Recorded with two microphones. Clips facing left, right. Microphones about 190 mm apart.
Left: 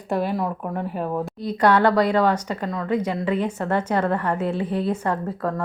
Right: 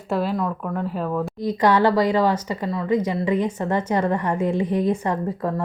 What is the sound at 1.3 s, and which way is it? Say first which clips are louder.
Speech: even; 10° right (ahead or behind).